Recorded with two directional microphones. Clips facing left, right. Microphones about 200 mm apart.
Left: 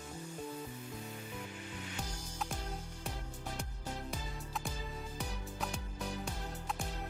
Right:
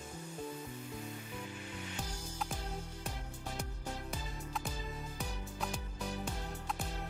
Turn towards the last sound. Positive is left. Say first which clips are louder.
# even
turn(degrees=0)  # may be behind; listen again after turning